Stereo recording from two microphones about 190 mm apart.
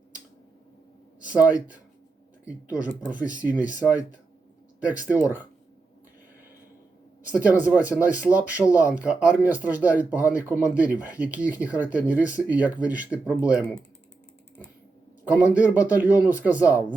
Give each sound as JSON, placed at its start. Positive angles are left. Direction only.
{"t": 1.2, "sound": "speech", "side_deg": -5}
{"t": 3.1, "sound": "speech", "side_deg": 20}
{"t": 3.4, "sound": "speech", "side_deg": -10}
{"t": 4.9, "sound": "speech", "side_deg": -10}
{"t": 7.3, "sound": "speech", "side_deg": -10}
{"t": 15.2, "sound": "a man's voice", "side_deg": -5}